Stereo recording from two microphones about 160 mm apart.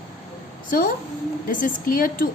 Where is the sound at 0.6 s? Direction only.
55° left (ahead or behind).